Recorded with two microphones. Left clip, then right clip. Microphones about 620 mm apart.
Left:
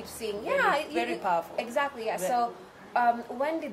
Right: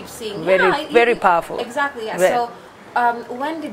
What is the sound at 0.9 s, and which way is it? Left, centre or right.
Speech, right.